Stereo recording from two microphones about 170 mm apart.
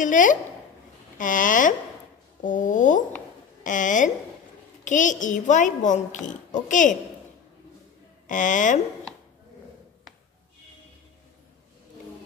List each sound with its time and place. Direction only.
0.0 s speech: 50° left (ahead or behind)
8.3 s speech: 50° left (ahead or behind)